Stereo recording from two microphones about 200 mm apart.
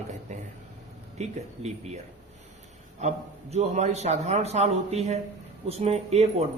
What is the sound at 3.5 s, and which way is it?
Speech, 35° right (ahead or behind).